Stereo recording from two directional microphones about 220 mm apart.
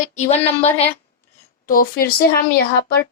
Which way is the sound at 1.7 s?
40° left (ahead or behind).